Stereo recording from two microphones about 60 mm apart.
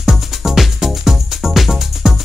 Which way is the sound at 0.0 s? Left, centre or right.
Centre.